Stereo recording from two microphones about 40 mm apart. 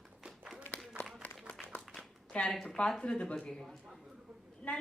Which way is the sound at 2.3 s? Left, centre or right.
Left.